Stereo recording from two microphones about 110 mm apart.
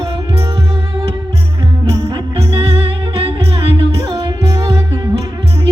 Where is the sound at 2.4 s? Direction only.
55° right (ahead or behind).